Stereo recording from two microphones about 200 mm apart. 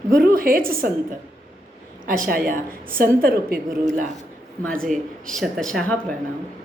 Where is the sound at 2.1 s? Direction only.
45° right (ahead or behind).